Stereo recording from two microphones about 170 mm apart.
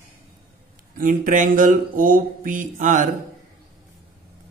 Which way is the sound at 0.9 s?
50° right (ahead or behind).